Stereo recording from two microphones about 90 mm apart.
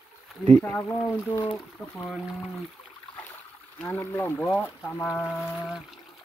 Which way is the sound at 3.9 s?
20° left (ahead or behind).